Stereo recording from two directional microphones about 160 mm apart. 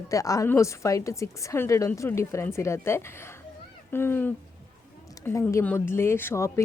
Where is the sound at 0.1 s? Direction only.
20° left (ahead or behind).